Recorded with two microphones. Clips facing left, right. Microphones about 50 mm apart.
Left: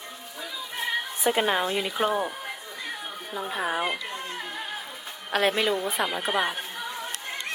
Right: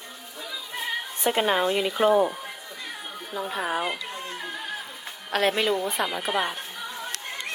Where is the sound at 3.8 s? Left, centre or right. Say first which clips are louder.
Even; centre.